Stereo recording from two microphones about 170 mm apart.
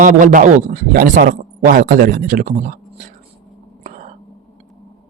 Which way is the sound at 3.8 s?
45° right (ahead or behind).